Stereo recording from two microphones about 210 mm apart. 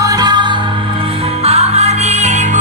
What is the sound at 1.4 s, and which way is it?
Music, 30° right (ahead or behind).